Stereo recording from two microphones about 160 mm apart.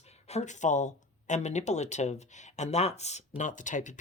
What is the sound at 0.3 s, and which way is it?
Speech, 45° left (ahead or behind).